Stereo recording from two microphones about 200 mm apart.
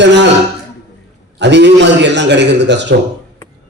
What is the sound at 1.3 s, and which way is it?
A man's voice, 60° right (ahead or behind).